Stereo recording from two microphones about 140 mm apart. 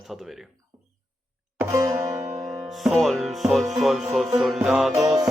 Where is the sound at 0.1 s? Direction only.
Centre (ahead or behind).